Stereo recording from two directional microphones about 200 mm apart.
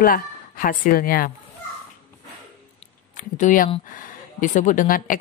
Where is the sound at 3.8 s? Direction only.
40° left (ahead or behind).